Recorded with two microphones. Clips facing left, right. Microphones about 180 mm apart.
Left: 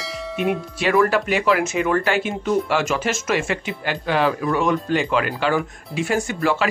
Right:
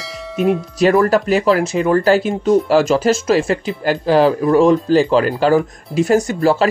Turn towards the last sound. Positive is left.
turn(degrees=-40)  # may be behind; listen again after turning